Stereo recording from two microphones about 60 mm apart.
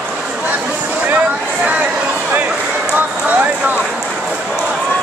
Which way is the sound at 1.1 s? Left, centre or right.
Right.